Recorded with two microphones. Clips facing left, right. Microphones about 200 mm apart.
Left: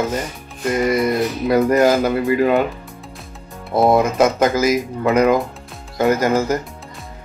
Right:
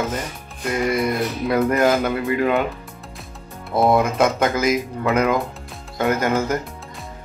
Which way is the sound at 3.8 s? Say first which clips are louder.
Left 3 dB; 5° left (ahead or behind).